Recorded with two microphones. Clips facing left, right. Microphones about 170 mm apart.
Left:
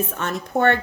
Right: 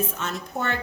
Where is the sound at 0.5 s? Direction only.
65° left (ahead or behind).